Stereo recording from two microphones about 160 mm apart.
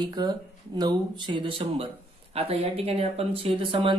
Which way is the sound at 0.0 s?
25° right (ahead or behind).